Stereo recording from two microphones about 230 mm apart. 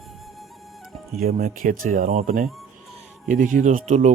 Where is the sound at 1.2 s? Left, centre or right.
Right.